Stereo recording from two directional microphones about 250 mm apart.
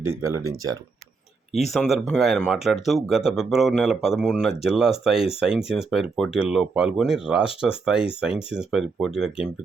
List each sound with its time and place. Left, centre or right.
0.2 s speech: centre
1.7 s speech: centre